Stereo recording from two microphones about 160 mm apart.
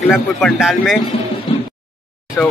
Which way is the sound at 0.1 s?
Centre (ahead or behind).